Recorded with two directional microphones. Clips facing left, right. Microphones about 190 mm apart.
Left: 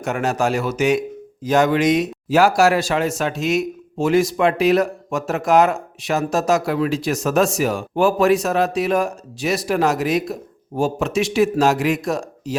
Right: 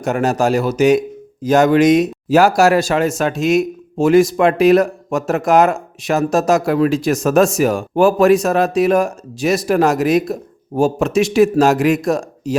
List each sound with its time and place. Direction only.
0.0 s a man's voice: 40° right (ahead or behind)